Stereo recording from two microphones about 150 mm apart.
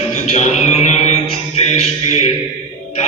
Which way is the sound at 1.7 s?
50° left (ahead or behind).